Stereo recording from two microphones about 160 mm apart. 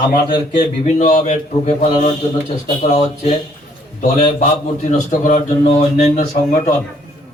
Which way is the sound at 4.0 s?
50° left (ahead or behind).